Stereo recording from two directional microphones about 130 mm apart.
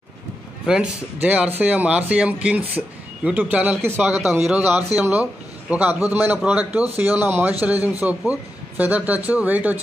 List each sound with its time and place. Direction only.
0.7 s speech: 10° right (ahead or behind)
4.2 s a man's voice: 5° right (ahead or behind)